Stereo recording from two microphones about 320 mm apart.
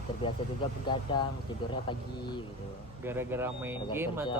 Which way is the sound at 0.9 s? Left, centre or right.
Centre.